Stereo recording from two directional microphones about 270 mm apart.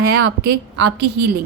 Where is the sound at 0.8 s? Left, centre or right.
Right.